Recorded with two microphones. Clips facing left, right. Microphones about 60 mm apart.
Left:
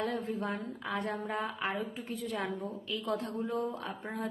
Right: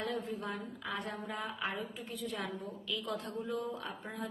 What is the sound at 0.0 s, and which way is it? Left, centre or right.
A woman's voice, left.